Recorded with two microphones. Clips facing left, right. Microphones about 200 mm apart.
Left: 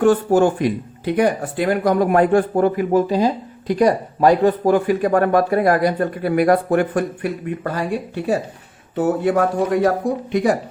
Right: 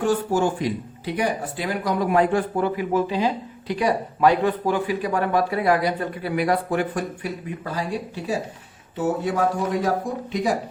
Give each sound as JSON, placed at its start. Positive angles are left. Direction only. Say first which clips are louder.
{"t": 0.0, "sound": "speech", "louder": "left 7 dB", "side_deg": 55}